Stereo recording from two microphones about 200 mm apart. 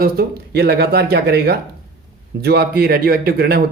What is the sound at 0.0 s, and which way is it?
Speech, 50° right (ahead or behind).